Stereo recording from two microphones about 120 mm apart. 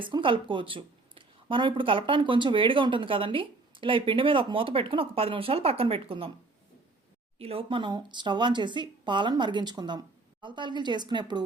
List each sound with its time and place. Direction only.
0.0 s a woman's voice: 45° right (ahead or behind)
7.3 s speech: 55° right (ahead or behind); by 11.4 s 40° right (ahead or behind)